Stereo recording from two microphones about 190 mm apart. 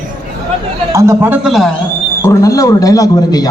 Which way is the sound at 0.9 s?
15° right (ahead or behind).